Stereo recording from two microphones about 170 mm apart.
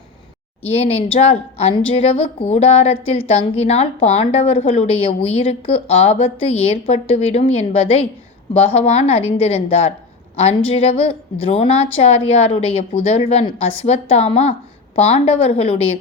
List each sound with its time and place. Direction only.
0.6 s a woman's voice: 35° left (ahead or behind)